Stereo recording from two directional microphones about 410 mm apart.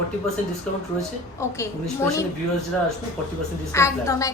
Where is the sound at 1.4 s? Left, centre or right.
Centre.